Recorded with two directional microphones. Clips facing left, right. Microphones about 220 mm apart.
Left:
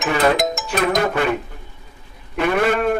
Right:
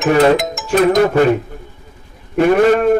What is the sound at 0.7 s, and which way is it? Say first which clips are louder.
Speech: right 10 dB; 40° right (ahead or behind).